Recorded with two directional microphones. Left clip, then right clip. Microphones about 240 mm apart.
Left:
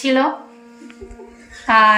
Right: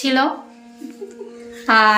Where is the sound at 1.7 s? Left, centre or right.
Centre.